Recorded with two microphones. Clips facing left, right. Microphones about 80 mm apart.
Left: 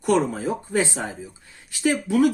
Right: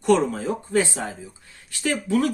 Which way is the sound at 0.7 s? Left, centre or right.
Left.